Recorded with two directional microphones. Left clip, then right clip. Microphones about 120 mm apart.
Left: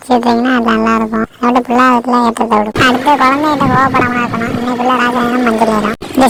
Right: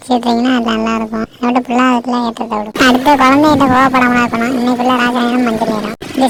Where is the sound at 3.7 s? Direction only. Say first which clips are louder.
Right 1 dB; 50° right (ahead or behind).